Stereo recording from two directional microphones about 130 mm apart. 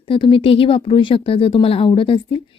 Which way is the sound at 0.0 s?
40° left (ahead or behind).